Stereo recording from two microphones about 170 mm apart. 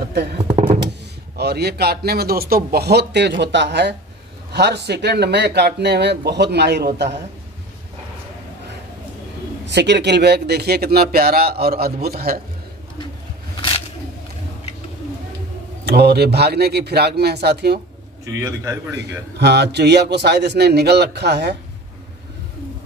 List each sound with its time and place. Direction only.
0.4 s a sound: 35° right (ahead or behind)
1.3 s a man's voice: 70° right (ahead or behind); by 3.9 s 90° right
4.5 s speech: 80° right
9.7 s speech: 90° right; by 12.4 s 65° right (ahead or behind)
13.6 s a sound: 30° left (ahead or behind)
15.8 s a man's voice: 70° right (ahead or behind)
18.2 s a man's voice: 15° right (ahead or behind)
19.3 s speech: 80° right